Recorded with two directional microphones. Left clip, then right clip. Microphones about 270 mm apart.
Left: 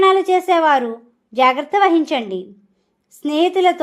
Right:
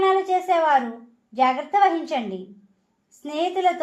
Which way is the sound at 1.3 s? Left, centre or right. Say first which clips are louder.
Left 5 dB; left.